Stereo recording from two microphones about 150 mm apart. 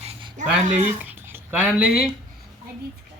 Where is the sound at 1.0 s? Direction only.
15° right (ahead or behind).